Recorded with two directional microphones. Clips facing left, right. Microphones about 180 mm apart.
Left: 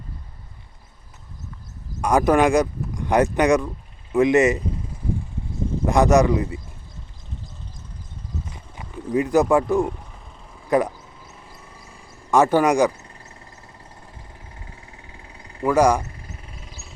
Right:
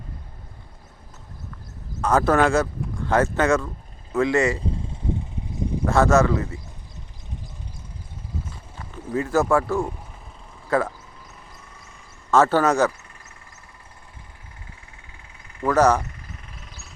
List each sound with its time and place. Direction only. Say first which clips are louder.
2.0 s speech: left 2 dB; 15° left (ahead or behind)
5.8 s speech: left 2 dB; 15° left (ahead or behind)
8.5 s horse: left 1 dB; 15° left (ahead or behind)
9.1 s speech: left 3 dB; 15° left (ahead or behind)
12.3 s speech: left 1 dB; 15° left (ahead or behind)
12.9 s vehicle: left 4 dB; 35° left (ahead or behind)
15.2 s vehicle: left 5 dB; 30° left (ahead or behind)
15.6 s speech: left 1 dB; 10° left (ahead or behind)
16.0 s a sound: left 1 dB; 30° left (ahead or behind)